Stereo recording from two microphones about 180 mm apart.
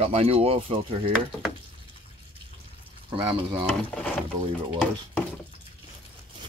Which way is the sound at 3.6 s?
5° left (ahead or behind).